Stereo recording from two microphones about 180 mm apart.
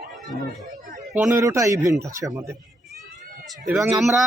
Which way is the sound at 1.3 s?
15° right (ahead or behind).